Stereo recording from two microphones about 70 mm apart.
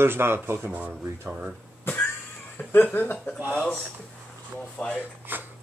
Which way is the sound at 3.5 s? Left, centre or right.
Centre.